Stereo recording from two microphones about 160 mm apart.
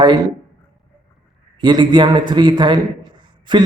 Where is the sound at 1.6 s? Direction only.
30° right (ahead or behind).